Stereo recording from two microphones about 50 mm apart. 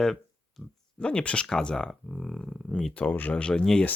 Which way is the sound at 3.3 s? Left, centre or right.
Centre.